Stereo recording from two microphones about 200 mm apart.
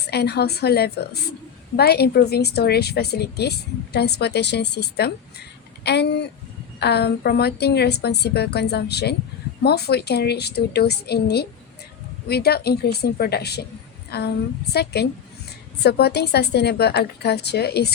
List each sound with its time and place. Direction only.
0.1 s a woman's voice: 55° left (ahead or behind)